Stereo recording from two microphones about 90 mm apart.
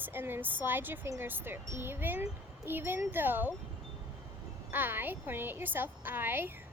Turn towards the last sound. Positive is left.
turn(degrees=-25)  # may be behind; listen again after turning